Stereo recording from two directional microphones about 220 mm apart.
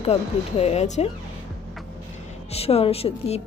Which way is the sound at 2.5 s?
25° left (ahead or behind).